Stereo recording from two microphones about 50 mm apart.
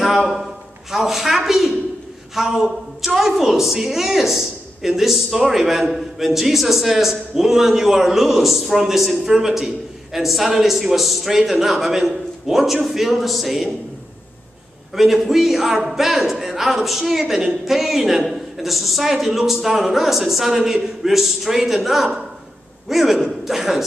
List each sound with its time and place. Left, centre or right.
0.0 s a sound: centre
0.9 s a woman's voice: centre
15.0 s a woman's voice: centre